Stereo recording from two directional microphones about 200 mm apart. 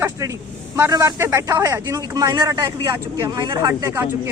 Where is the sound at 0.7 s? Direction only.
15° right (ahead or behind).